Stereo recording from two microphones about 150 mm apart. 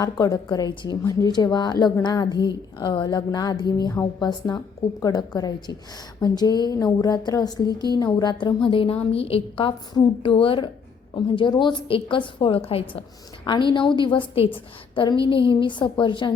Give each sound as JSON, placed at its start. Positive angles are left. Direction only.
{"t": 0.0, "sound": "a woman's voice", "side_deg": 25}